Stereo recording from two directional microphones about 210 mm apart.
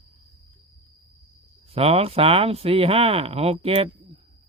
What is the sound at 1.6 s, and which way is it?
Speech, 25° right (ahead or behind).